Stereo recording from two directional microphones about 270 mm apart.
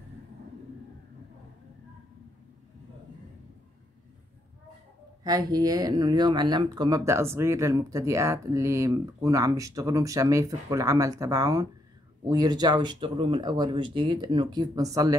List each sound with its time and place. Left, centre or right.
5.2 s speech: centre